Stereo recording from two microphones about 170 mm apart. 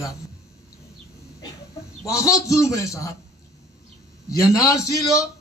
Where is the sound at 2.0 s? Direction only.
20° left (ahead or behind).